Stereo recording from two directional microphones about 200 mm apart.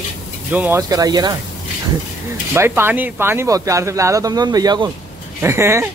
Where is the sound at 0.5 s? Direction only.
10° right (ahead or behind).